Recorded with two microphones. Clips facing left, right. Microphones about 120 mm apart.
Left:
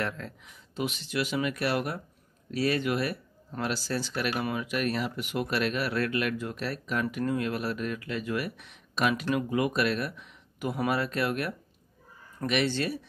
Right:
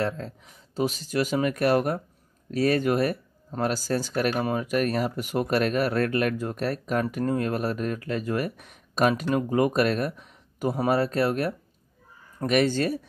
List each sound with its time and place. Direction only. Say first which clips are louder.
0.0 s speech: right 5 dB; 35° right (ahead or behind)